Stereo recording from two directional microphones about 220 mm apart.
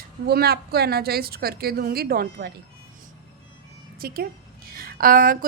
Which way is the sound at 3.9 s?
40° right (ahead or behind).